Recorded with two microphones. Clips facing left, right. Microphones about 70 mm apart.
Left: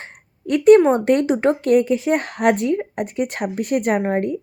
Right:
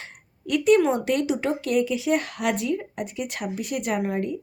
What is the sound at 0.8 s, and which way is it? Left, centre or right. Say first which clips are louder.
Speech: left 6 dB; left.